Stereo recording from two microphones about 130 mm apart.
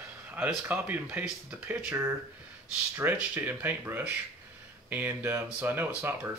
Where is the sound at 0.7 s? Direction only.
10° right (ahead or behind).